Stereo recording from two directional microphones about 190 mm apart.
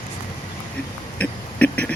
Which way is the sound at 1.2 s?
5° left (ahead or behind).